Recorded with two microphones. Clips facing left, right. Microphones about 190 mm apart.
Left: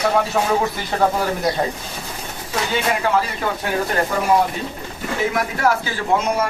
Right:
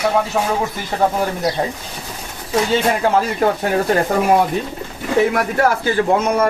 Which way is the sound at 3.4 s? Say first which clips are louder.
Right 7 dB; 45° right (ahead or behind).